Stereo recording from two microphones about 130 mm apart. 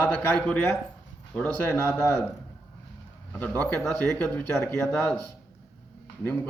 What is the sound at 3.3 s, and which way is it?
A man's voice, 10° left (ahead or behind).